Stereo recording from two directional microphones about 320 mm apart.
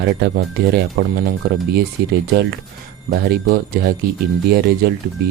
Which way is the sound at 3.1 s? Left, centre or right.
Right.